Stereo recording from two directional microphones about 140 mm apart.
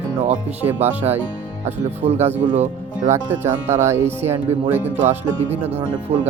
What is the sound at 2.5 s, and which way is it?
Speech, 60° right (ahead or behind).